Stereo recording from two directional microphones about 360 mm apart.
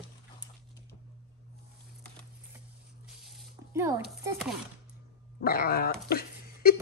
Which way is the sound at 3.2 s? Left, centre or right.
Centre.